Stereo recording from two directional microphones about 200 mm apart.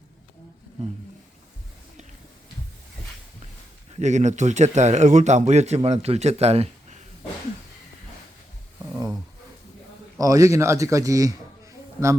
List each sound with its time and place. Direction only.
3.9 s a man's voice: 35° right (ahead or behind)
10.2 s a man's voice: 15° right (ahead or behind)